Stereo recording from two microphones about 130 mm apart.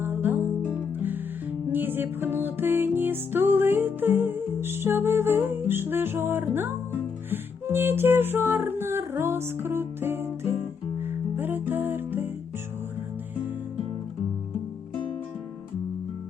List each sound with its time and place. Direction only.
0.0 s music: 15° right (ahead or behind)
1.7 s music: 15° right (ahead or behind)